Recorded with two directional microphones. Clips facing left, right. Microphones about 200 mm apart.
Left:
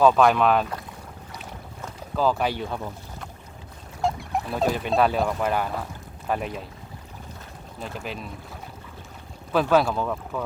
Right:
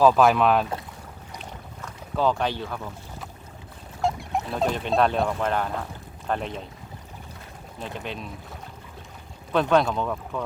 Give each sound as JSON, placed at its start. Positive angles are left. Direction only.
{"t": 0.0, "sound": "speech", "side_deg": 0}
{"t": 2.1, "sound": "speech", "side_deg": 5}
{"t": 2.6, "sound": "speech", "side_deg": 25}
{"t": 4.0, "sound": "speech", "side_deg": 0}
{"t": 7.8, "sound": "speech", "side_deg": 0}
{"t": 9.5, "sound": "speech", "side_deg": 5}